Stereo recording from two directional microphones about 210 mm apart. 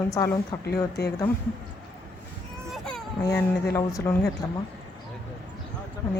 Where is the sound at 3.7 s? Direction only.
10° left (ahead or behind).